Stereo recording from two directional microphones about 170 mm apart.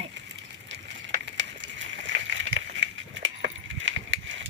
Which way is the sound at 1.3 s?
90° right.